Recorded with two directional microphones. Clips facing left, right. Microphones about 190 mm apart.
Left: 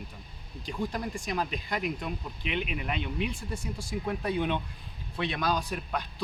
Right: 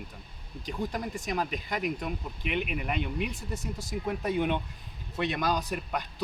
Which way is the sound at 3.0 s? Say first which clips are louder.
Right 1 dB; 50° right (ahead or behind).